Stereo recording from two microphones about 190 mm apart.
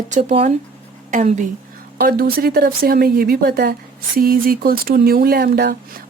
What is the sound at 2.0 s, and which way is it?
A woman's voice, 50° right (ahead or behind).